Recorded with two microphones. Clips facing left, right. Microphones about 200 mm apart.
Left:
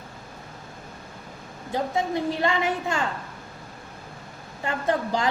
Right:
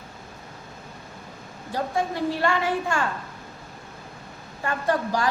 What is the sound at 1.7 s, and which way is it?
A woman's voice, 20° left (ahead or behind).